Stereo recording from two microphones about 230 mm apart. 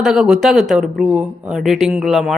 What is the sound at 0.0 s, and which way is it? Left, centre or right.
Speech, centre.